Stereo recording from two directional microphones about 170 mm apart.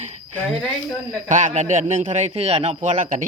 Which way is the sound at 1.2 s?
45° right (ahead or behind).